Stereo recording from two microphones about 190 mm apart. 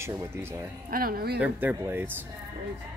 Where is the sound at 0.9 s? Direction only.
50° right (ahead or behind).